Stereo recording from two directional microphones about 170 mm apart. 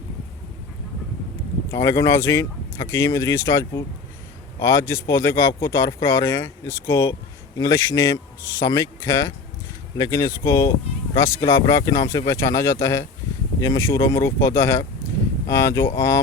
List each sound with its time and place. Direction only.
1.7 s speech: 20° left (ahead or behind)